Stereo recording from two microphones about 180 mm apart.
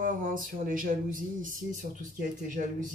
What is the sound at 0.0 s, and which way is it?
Speech, 50° right (ahead or behind).